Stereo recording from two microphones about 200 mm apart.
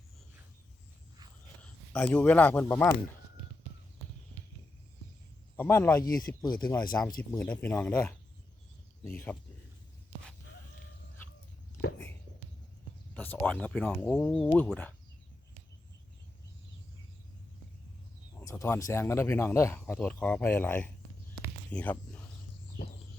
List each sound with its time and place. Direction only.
1.9 s speech: 10° left (ahead or behind)
5.5 s speech: 10° left (ahead or behind)
7.2 s speech: 5° left (ahead or behind)
13.1 s speech: 5° left (ahead or behind)
18.3 s a sound: 10° left (ahead or behind)
18.9 s speech: 15° left (ahead or behind)
21.7 s a sound: 5° left (ahead or behind)